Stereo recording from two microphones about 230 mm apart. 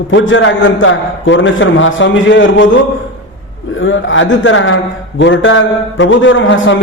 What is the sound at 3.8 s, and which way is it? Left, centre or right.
A man's voice, left.